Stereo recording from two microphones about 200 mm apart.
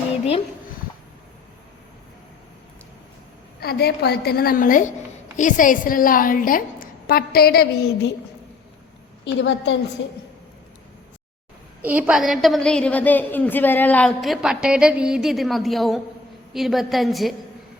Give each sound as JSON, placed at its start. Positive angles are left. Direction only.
{"t": 3.6, "sound": "a woman's voice", "side_deg": 50}
{"t": 9.2, "sound": "a woman's voice", "side_deg": 65}
{"t": 11.8, "sound": "a woman's voice", "side_deg": -10}